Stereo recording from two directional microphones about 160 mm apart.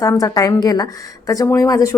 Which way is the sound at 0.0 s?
20° left (ahead or behind).